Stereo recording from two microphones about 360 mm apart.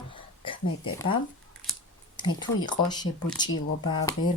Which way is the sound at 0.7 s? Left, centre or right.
Left.